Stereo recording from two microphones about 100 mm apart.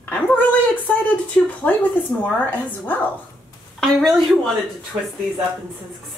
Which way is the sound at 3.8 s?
5° left (ahead or behind).